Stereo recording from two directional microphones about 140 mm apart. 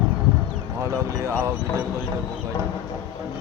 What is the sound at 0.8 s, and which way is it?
Speech, 20° right (ahead or behind).